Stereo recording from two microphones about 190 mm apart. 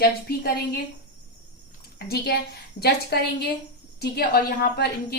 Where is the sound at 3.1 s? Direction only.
60° left (ahead or behind).